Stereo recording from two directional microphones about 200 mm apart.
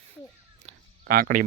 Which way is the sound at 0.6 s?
35° right (ahead or behind).